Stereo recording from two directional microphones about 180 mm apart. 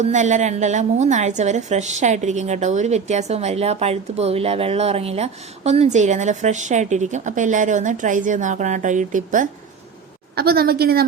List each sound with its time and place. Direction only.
0.0 s a woman's voice: 40° right (ahead or behind)
10.3 s a woman's voice: 60° right (ahead or behind)